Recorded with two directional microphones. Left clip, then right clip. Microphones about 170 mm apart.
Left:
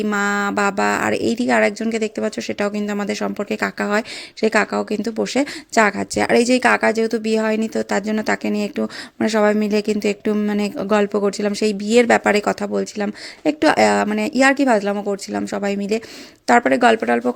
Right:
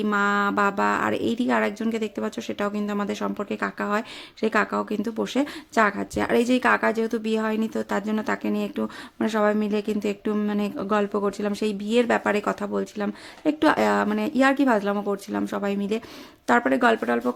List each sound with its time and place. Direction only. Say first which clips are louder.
0.0 s a woman's voice: left 2 dB; 20° left (ahead or behind)